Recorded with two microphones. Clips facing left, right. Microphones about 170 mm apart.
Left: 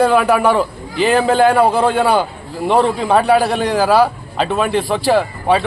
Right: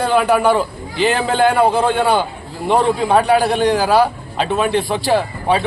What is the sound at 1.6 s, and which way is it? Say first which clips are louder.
Speech: left 1 dB; 5° left (ahead or behind).